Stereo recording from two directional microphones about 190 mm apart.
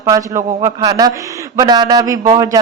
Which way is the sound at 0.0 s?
15° right (ahead or behind).